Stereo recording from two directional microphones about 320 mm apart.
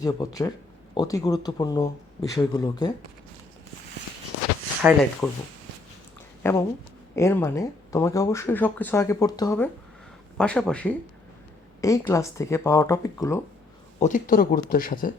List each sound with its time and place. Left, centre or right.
0.2 s speech: centre
4.8 s speech: centre
6.4 s a woman's voice: centre
14.0 s speech: left